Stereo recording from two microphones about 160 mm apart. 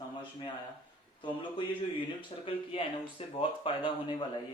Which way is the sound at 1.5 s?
30° left (ahead or behind).